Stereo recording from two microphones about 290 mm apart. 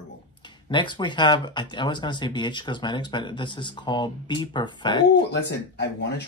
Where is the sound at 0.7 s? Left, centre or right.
Centre.